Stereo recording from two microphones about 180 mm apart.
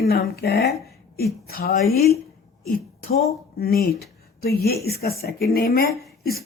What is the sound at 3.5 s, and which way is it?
A woman's voice, 55° left (ahead or behind).